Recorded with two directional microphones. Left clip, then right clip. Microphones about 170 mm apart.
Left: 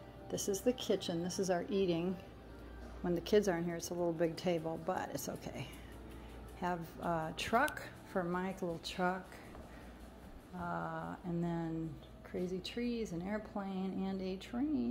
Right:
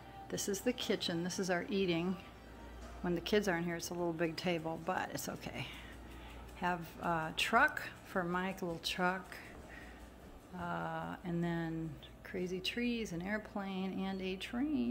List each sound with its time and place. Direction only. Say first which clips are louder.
0.3 s a woman's voice: left 2 dB; 15° right (ahead or behind)
10.6 s speech: right 1 dB; 15° right (ahead or behind)